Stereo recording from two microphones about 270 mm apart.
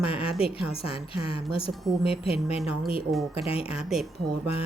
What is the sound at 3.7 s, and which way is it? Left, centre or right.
Speech, centre.